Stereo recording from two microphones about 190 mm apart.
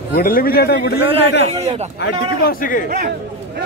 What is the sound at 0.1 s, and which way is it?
Speech, 50° left (ahead or behind).